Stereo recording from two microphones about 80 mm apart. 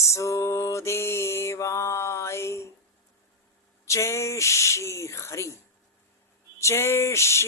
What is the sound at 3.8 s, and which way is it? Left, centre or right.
Speech, left.